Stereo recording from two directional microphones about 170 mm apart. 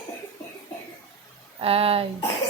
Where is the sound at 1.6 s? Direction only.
35° right (ahead or behind).